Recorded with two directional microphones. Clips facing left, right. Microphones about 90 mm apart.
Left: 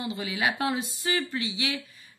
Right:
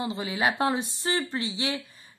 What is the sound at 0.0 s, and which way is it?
Speech, 30° right (ahead or behind).